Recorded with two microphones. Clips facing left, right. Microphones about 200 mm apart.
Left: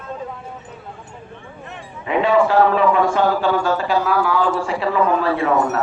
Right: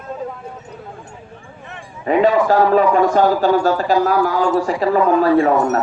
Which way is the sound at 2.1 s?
40° right (ahead or behind).